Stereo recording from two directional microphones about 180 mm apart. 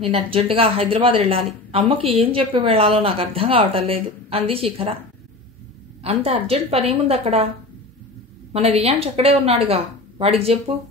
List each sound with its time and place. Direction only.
0.0 s a woman's voice: 30° right (ahead or behind)
6.0 s a woman's voice: 35° right (ahead or behind)
8.7 s a woman's voice: 35° right (ahead or behind)